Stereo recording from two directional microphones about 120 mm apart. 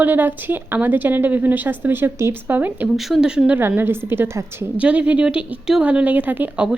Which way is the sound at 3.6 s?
20° right (ahead or behind).